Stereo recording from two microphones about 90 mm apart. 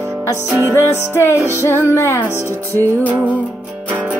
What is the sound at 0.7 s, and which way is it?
Music, 30° left (ahead or behind).